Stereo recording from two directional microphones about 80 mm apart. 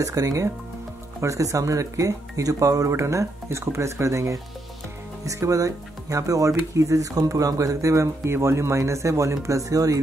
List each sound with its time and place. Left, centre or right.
0.0 s speech: right